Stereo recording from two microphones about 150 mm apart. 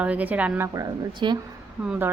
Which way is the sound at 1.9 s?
15° right (ahead or behind).